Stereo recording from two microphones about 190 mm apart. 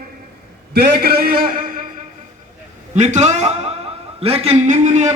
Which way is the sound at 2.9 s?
40° right (ahead or behind).